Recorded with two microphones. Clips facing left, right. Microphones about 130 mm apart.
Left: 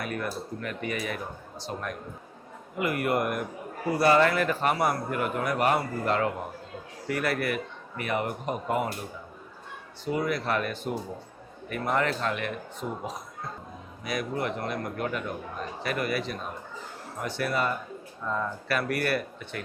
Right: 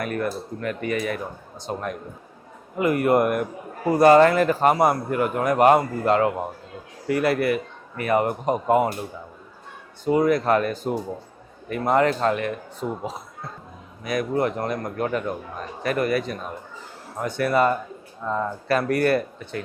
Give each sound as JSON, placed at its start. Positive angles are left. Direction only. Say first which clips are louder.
{"t": 0.0, "sound": "speech", "louder": "right 6 dB", "side_deg": -45}
{"t": 2.7, "sound": "a man's voice", "louder": "right 8 dB", "side_deg": -40}
{"t": 10.1, "sound": "a man's voice", "louder": "right 9 dB", "side_deg": -45}
{"t": 14.0, "sound": "speech", "louder": "right 7 dB", "side_deg": -50}
{"t": 18.2, "sound": "a man's voice", "louder": "right 5 dB", "side_deg": -30}